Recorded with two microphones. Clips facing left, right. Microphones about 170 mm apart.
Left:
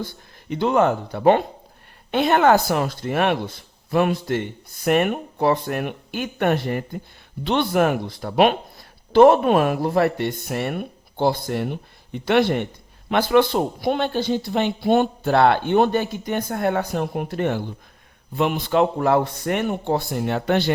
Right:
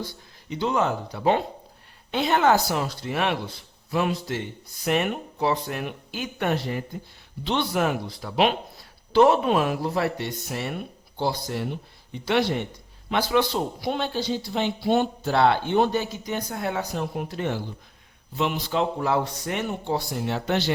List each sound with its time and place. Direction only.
0.0 s speech: 55° left (ahead or behind)